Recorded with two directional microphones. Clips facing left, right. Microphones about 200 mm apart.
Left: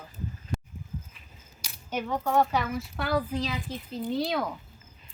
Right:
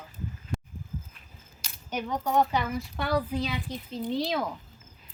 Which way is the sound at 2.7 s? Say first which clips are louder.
Even; centre (ahead or behind).